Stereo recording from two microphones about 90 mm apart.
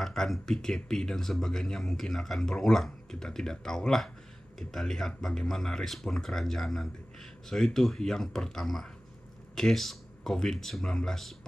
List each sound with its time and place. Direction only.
0.0 s speech: 5° left (ahead or behind)